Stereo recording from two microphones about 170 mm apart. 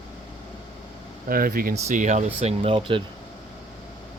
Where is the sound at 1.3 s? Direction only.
60° right (ahead or behind); by 3.0 s 35° right (ahead or behind).